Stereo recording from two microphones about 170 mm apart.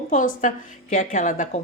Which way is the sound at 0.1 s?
50° left (ahead or behind).